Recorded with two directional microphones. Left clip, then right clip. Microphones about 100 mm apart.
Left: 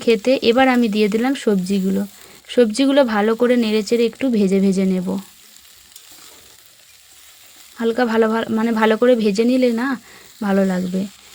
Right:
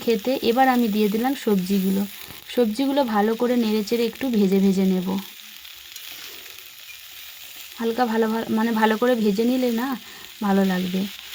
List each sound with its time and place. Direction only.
0.0 s speech: 30° left (ahead or behind)
7.8 s speech: 30° left (ahead or behind)